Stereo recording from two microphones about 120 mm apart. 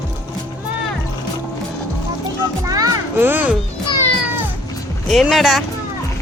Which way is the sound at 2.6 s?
30° right (ahead or behind).